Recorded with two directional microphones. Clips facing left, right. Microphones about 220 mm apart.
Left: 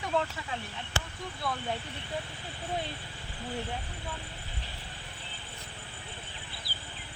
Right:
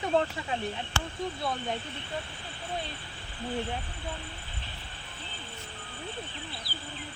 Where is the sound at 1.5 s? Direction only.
25° right (ahead or behind).